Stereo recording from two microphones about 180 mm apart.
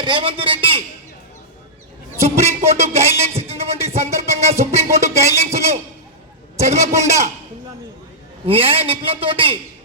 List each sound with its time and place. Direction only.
0.0 s a man's voice: 25° right (ahead or behind)
2.2 s a man's voice: 35° right (ahead or behind)
8.4 s a man's voice: 30° right (ahead or behind)